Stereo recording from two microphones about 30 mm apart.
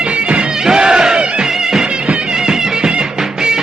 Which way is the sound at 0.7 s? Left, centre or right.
Right.